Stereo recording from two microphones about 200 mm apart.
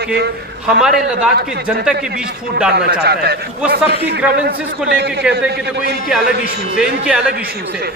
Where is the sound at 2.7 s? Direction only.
55° right (ahead or behind).